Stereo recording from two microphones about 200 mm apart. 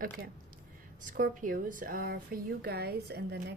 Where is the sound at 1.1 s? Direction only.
45° right (ahead or behind).